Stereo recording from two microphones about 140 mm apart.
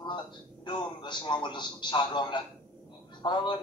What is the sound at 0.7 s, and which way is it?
A man's voice, 35° left (ahead or behind).